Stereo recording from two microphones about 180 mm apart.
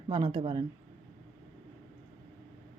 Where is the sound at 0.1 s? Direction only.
25° right (ahead or behind).